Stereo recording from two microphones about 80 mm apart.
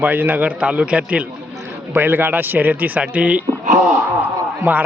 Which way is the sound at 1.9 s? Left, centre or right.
Right.